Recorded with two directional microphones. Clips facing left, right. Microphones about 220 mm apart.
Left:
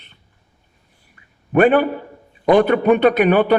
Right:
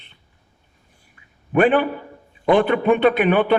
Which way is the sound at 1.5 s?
40° left (ahead or behind).